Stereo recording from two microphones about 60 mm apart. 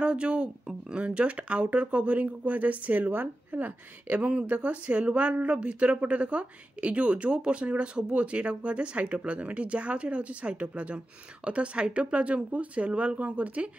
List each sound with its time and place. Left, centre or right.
0.0 s speech: centre